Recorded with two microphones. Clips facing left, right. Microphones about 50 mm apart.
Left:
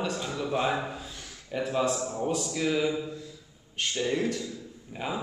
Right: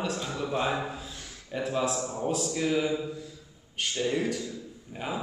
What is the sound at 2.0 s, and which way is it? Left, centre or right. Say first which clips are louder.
Speech: left 1 dB; right.